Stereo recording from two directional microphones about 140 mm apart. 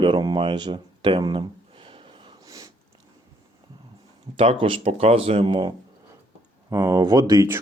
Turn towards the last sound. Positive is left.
turn(degrees=-25)  # may be behind; listen again after turning